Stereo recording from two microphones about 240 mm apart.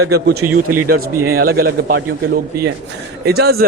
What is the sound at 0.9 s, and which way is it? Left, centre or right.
A man's voice, right.